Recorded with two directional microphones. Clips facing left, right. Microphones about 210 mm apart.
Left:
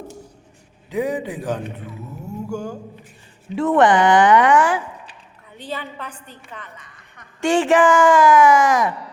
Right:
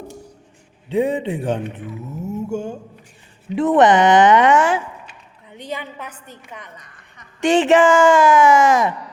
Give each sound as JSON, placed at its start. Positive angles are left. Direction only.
{"t": 0.9, "sound": "a woman's voice", "side_deg": -25}
{"t": 7.4, "sound": "speech", "side_deg": -20}